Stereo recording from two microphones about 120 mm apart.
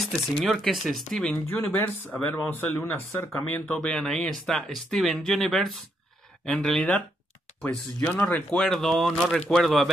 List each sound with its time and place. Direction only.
0.5 s speech: centre (ahead or behind)
1.5 s speech: 15° left (ahead or behind)